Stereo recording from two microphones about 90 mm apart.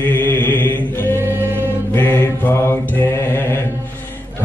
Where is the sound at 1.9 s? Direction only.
20° left (ahead or behind).